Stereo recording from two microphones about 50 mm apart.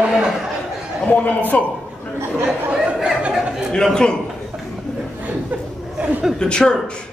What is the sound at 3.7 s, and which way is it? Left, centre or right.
Speech, centre.